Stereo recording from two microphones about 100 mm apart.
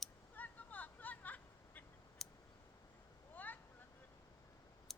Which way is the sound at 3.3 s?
15° left (ahead or behind).